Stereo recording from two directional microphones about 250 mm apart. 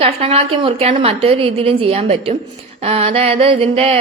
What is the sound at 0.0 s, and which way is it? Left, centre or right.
Speech, right.